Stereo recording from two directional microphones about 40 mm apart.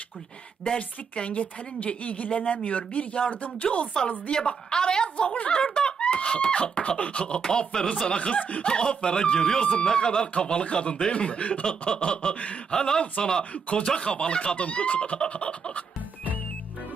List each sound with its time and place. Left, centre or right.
0.8 s speech: left
4.3 s speech: centre
5.5 s a sound: left
6.0 s a sound: left
6.2 s speech: left
8.6 s speech: left
12.7 s speech: centre
13.5 s speech: left
13.9 s speech: left